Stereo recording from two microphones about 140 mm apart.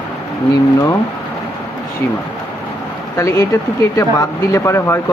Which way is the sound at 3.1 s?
20° left (ahead or behind).